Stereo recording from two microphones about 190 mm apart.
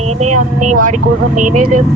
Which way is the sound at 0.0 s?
35° right (ahead or behind).